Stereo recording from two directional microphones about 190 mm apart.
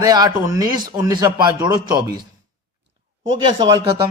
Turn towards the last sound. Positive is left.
turn(degrees=-25)  # may be behind; listen again after turning